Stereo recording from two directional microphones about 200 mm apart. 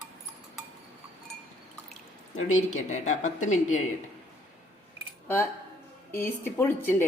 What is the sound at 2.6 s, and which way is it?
Speech, 35° left (ahead or behind).